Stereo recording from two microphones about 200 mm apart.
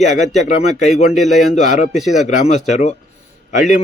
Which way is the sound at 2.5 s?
35° left (ahead or behind).